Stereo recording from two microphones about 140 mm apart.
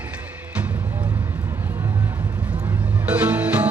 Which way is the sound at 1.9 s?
30° right (ahead or behind).